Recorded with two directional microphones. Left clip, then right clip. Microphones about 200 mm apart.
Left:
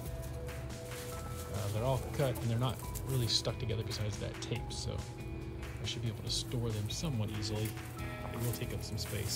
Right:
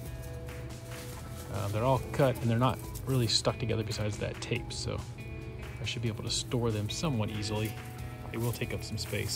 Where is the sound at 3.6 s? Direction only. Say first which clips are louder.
Right 6 dB; 50° left (ahead or behind).